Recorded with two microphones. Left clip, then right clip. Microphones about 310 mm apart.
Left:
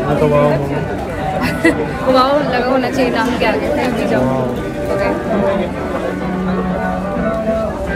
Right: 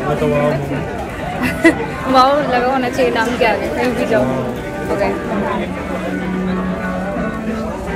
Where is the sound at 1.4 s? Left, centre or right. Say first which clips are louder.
Right 2 dB; centre.